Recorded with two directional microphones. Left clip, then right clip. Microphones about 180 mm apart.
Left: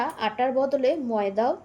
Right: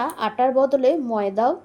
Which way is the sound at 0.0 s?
35° right (ahead or behind).